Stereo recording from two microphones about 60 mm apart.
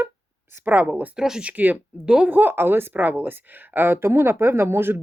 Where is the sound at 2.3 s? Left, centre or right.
Right.